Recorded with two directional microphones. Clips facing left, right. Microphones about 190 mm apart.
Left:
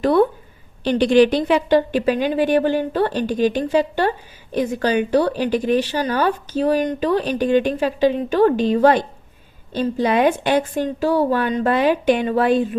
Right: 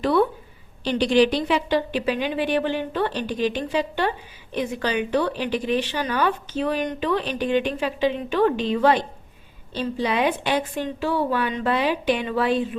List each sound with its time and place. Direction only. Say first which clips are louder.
0.0 s a woman's voice: left 4 dB; 45° left (ahead or behind)